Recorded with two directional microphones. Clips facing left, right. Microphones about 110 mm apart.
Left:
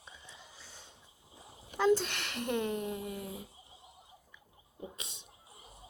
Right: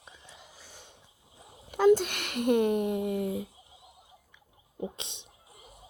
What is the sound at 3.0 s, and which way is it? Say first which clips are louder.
Speech: right 11 dB; 85° right.